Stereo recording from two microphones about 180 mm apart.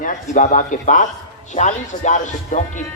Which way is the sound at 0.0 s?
45° left (ahead or behind).